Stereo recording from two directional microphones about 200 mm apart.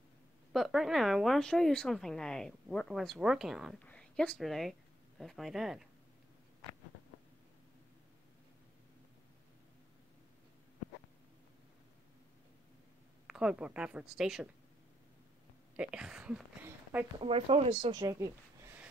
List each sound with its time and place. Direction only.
0.5 s speech: centre (ahead or behind)
13.3 s speech: 5° right (ahead or behind)
15.7 s speech: 5° right (ahead or behind)
17.2 s speech: 30° right (ahead or behind); by 18.9 s 15° right (ahead or behind)